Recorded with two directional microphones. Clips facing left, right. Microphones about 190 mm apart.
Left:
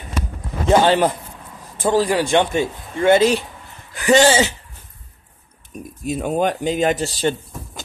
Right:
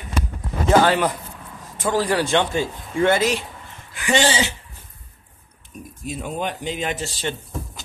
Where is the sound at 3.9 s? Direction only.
40° left (ahead or behind).